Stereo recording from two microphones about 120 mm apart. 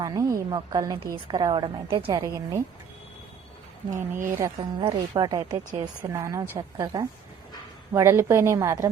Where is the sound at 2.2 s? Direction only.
30° right (ahead or behind).